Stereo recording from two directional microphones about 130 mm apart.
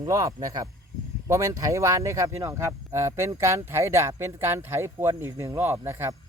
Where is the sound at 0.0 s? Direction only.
25° right (ahead or behind).